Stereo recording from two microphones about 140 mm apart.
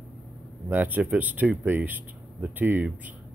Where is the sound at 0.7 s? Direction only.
10° right (ahead or behind).